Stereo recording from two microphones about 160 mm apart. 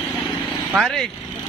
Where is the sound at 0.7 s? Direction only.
Centre (ahead or behind).